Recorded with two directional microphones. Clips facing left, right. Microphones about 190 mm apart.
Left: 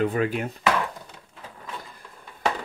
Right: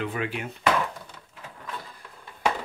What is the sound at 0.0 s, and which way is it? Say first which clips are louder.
Speech: left 6 dB; 40° left (ahead or behind).